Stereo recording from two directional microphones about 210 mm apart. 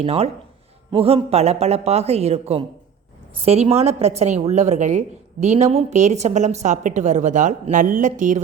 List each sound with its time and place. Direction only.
0.0 s a woman's voice: 30° right (ahead or behind)